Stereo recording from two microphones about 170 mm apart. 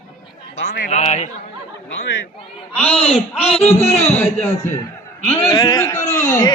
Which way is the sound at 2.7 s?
5° left (ahead or behind).